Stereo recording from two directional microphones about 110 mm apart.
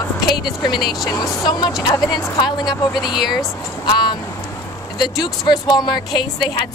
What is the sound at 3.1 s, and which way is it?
Speech, 5° right (ahead or behind).